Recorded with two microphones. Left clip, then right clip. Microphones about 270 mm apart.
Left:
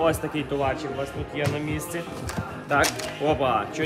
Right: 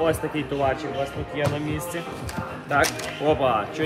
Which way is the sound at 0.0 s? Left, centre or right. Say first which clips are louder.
Even; centre.